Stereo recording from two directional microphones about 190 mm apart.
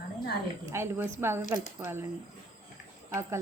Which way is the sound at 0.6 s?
15° right (ahead or behind).